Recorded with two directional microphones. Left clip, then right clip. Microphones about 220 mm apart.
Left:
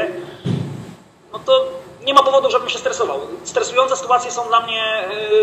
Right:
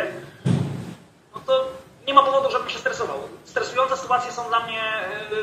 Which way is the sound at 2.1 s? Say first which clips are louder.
Left 4 dB; 45° left (ahead or behind).